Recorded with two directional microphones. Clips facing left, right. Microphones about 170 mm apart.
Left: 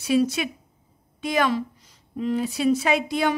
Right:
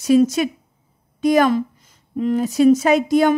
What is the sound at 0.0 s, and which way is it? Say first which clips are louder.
Speech: right 7 dB; 45° right (ahead or behind).